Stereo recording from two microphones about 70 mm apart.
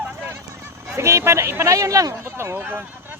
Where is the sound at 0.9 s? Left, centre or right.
Right.